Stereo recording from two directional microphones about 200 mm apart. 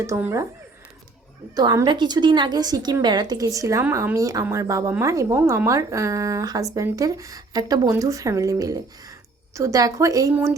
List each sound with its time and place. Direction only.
0.0 s a woman's voice: 15° right (ahead or behind)
1.5 s a woman's voice: 20° right (ahead or behind)